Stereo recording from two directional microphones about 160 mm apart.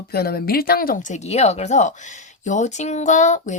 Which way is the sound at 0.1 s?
75° left (ahead or behind).